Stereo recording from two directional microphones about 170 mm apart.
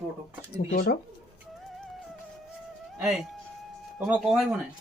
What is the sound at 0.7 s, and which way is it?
Speech, 60° left (ahead or behind).